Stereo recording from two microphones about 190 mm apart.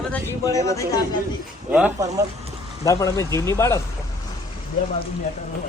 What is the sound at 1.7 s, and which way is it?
Speech, 10° right (ahead or behind).